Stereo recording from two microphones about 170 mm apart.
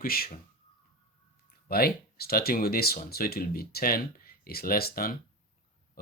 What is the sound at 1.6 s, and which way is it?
Speech, 65° left (ahead or behind).